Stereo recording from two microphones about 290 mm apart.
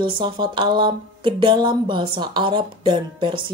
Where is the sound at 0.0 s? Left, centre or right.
Centre.